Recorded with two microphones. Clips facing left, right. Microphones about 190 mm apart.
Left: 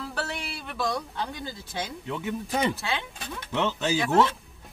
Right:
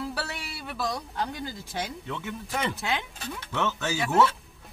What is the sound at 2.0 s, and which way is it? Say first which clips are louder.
A man's voice: left 4 dB; 15° left (ahead or behind).